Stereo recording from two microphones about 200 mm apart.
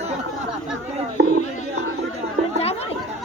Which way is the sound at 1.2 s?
60° right (ahead or behind).